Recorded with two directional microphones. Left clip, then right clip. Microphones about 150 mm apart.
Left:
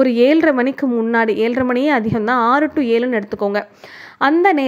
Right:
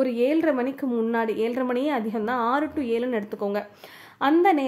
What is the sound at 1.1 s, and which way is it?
A woman's voice, 35° left (ahead or behind).